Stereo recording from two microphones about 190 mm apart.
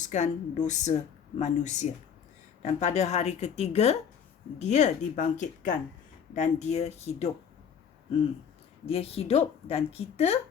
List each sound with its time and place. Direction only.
0.0 s a woman's voice: 40° left (ahead or behind)
8.9 s a woman's voice: 30° left (ahead or behind)